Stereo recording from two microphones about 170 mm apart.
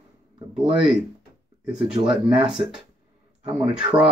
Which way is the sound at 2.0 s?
30° right (ahead or behind).